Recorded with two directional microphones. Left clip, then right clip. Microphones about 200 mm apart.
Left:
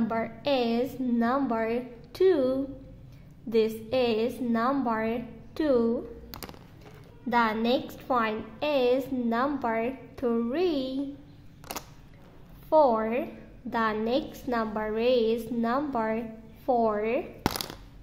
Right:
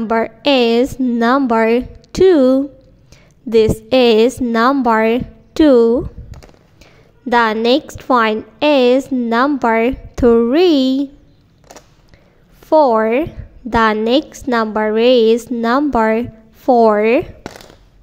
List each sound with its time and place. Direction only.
0.1 s a woman's voice: 35° right (ahead or behind)
7.2 s a woman's voice: 35° right (ahead or behind)
12.6 s a woman's voice: 35° right (ahead or behind)